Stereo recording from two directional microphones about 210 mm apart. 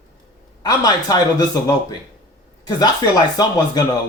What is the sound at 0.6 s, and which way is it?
Speech, 15° left (ahead or behind).